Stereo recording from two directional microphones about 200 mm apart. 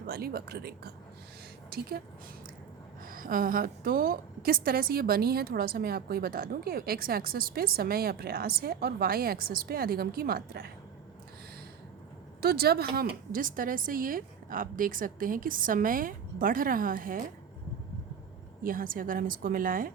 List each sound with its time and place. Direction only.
0.1 s a woman's voice: 50° right (ahead or behind)
3.0 s a woman's voice: 45° right (ahead or behind)
12.4 s a woman's voice: 50° right (ahead or behind)
18.6 s a woman's voice: 45° right (ahead or behind)